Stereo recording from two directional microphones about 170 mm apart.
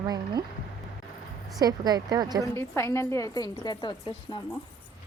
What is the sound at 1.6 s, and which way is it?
Speech, 25° right (ahead or behind).